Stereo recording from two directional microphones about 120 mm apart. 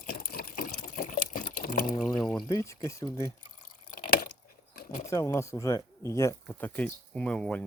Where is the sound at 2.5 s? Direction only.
25° left (ahead or behind).